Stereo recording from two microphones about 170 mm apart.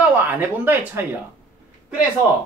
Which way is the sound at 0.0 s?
10° right (ahead or behind).